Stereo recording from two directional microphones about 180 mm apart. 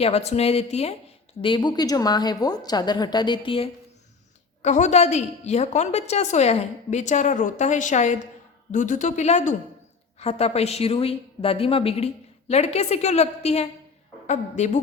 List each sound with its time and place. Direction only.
0.0 s a woman's voice: 35° left (ahead or behind)
4.6 s a woman's voice: 40° left (ahead or behind)